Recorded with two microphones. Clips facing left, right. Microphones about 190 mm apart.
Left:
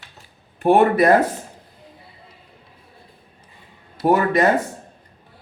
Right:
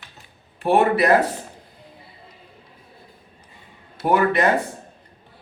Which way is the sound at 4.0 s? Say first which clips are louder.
Left 2 dB; 35° left (ahead or behind).